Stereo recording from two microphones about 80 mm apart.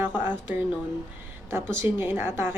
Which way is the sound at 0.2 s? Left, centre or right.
Right.